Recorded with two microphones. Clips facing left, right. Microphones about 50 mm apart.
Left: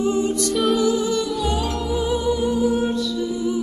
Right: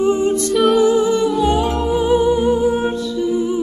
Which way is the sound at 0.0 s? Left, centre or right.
Right.